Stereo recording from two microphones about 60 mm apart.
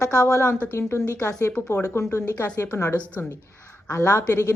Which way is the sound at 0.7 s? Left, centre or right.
Left.